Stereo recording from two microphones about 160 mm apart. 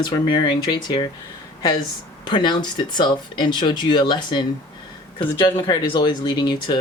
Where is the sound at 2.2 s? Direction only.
30° left (ahead or behind).